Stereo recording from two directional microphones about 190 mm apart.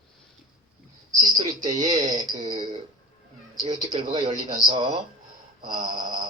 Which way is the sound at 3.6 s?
25° right (ahead or behind).